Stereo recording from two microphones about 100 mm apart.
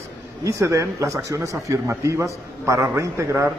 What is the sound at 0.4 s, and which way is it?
A man's voice, 30° right (ahead or behind).